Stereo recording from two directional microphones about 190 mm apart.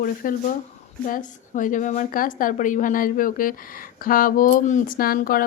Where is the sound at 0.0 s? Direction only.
50° left (ahead or behind).